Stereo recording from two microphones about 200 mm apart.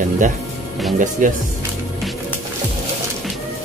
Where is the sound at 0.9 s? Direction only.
40° right (ahead or behind).